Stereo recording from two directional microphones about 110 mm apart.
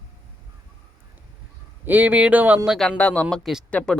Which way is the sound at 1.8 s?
15° right (ahead or behind).